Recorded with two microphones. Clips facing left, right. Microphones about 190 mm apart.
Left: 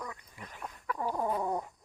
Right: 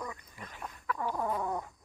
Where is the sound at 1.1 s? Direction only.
15° left (ahead or behind).